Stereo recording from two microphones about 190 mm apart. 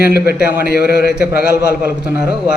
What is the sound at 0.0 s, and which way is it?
A man's voice, 55° left (ahead or behind).